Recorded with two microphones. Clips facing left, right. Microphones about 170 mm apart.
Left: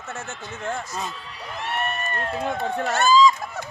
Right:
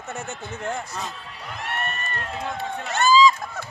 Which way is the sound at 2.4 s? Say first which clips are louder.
Left 5 dB; 50° left (ahead or behind).